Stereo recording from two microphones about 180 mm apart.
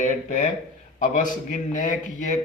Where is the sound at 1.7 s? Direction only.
45° left (ahead or behind).